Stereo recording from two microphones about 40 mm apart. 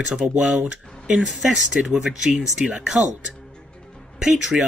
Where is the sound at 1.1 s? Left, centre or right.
Centre.